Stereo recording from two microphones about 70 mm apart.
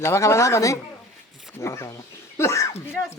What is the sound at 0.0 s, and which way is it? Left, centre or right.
A woman's voice, left.